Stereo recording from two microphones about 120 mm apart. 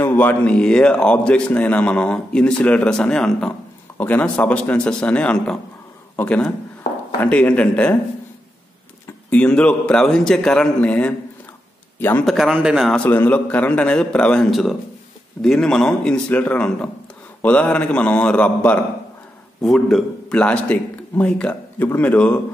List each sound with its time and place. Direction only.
0.0 s a man's voice: 15° left (ahead or behind)
9.3 s a man's voice: 10° left (ahead or behind)
12.3 s speech: centre (ahead or behind)
12.9 s a man's voice: 15° left (ahead or behind)